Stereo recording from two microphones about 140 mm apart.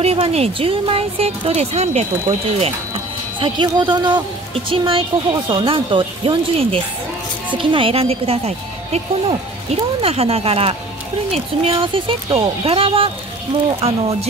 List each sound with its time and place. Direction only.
0.0 s speech: 45° right (ahead or behind)
3.3 s speech: 35° right (ahead or behind)